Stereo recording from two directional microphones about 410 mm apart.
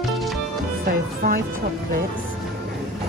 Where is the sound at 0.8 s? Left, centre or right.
Right.